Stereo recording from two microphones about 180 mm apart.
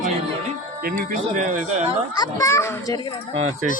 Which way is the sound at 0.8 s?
50° right (ahead or behind).